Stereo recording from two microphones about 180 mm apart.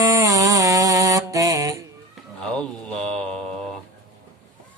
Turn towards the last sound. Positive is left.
turn(degrees=5)  # may be behind; listen again after turning